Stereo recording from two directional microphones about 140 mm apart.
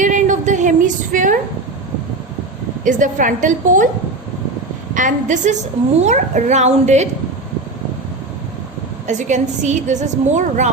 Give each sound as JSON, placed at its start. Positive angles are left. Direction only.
{"t": 0.0, "sound": "a sound", "side_deg": -65}
{"t": 2.8, "sound": "a woman's voice", "side_deg": -70}
{"t": 4.9, "sound": "a woman's voice", "side_deg": -65}
{"t": 9.0, "sound": "a woman's voice", "side_deg": -60}